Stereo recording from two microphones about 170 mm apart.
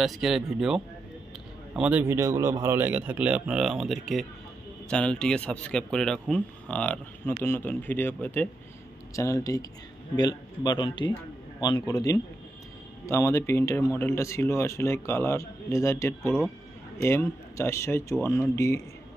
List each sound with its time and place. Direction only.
0.0 s a man's voice: centre (ahead or behind); by 18.4 s 15° left (ahead or behind)